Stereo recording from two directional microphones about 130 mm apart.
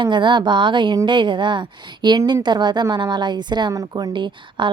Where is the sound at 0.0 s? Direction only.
35° right (ahead or behind).